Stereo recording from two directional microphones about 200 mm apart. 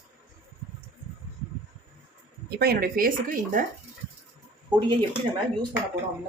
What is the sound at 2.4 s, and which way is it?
Speech, 50° right (ahead or behind).